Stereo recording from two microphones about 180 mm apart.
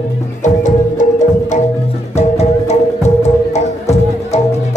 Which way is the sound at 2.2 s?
35° left (ahead or behind).